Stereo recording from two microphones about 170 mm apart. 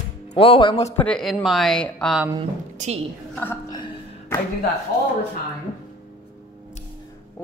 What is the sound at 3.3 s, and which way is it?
Speech, 10° left (ahead or behind).